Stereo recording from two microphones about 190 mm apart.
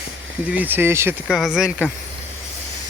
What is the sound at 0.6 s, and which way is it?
Speech, 10° right (ahead or behind).